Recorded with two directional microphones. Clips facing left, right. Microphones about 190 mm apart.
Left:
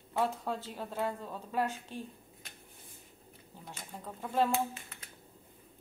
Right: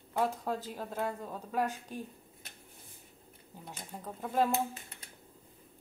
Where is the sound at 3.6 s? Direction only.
10° right (ahead or behind).